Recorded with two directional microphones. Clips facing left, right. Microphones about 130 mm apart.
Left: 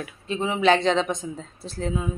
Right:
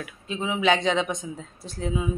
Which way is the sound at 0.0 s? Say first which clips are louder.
Left 3 dB; centre (ahead or behind).